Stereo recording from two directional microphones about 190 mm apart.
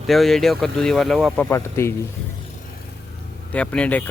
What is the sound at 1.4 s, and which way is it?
Speech, 15° left (ahead or behind).